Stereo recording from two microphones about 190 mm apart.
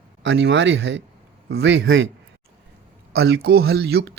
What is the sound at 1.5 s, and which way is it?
Speech, 65° right (ahead or behind).